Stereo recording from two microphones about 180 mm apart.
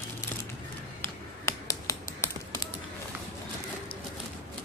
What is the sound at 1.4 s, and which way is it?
Finger snapping, 15° left (ahead or behind).